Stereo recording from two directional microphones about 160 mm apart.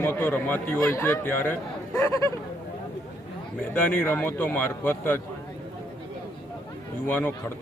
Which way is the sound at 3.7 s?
10° left (ahead or behind).